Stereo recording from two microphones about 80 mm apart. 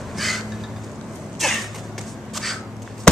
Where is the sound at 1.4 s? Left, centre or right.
Centre.